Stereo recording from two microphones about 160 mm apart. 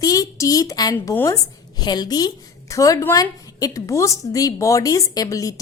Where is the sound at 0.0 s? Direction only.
20° left (ahead or behind).